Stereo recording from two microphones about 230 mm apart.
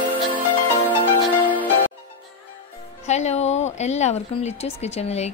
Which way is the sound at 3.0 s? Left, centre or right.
Left.